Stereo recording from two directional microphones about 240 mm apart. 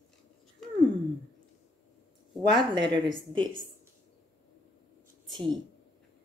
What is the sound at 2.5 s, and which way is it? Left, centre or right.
Speech, centre.